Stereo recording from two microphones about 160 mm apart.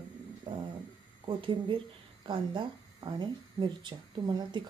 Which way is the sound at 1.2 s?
35° right (ahead or behind).